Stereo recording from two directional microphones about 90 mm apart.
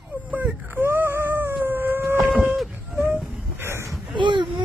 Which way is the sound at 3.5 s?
30° right (ahead or behind).